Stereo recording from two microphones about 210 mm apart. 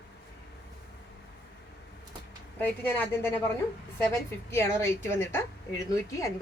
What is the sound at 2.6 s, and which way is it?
Speech, 10° left (ahead or behind).